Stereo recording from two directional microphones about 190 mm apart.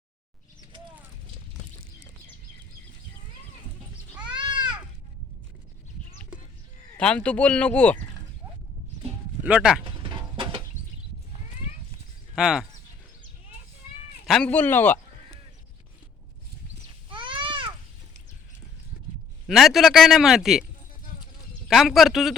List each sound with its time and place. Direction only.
4.2 s goat: 25° right (ahead or behind)
6.9 s speech: 5° left (ahead or behind)
9.4 s speech: 5° right (ahead or behind)
9.8 s music: 25° right (ahead or behind)
12.4 s a man's voice: 5° right (ahead or behind)
14.3 s speech: 5° left (ahead or behind)
17.1 s a sound: 25° right (ahead or behind)
19.5 s a man's voice: centre (ahead or behind)
21.7 s a man's voice: centre (ahead or behind)